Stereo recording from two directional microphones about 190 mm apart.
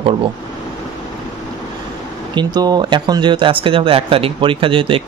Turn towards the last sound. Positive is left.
turn(degrees=-25)  # may be behind; listen again after turning